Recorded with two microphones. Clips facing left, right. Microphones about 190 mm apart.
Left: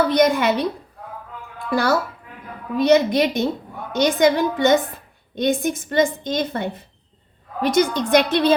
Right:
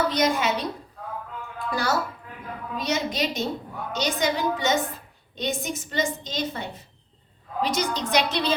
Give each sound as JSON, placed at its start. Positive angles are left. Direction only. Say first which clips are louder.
{"t": 0.1, "sound": "a woman's voice", "louder": "left 7 dB", "side_deg": 60}
{"t": 1.7, "sound": "a woman's voice", "louder": "left 7 dB", "side_deg": 60}